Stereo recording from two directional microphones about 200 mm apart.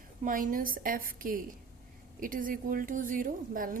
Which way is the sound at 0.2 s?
40° right (ahead or behind).